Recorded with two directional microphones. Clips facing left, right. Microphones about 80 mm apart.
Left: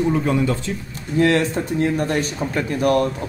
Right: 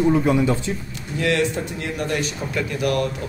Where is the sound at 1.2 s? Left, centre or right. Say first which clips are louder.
Left 4 dB; left.